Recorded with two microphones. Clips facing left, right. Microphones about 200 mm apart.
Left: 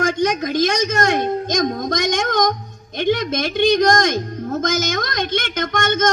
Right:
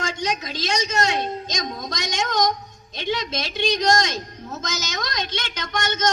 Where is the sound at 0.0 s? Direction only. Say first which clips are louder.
Left 8 dB; 55° left (ahead or behind).